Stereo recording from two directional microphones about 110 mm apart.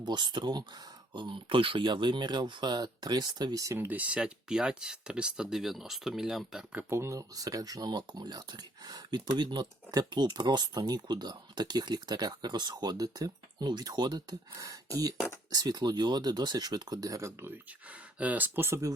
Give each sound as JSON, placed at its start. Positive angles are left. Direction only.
{"t": 0.0, "sound": "speech", "side_deg": -45}
{"t": 3.8, "sound": "speech", "side_deg": -15}
{"t": 6.7, "sound": "speech", "side_deg": -25}
{"t": 14.5, "sound": "speech", "side_deg": -30}